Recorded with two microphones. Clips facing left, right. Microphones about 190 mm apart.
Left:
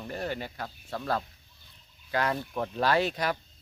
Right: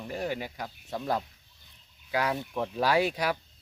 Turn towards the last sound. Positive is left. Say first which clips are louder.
# right 1 dB
turn(degrees=-10)  # may be behind; listen again after turning